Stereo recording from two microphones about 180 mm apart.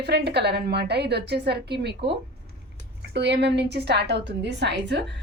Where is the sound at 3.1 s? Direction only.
70° right (ahead or behind).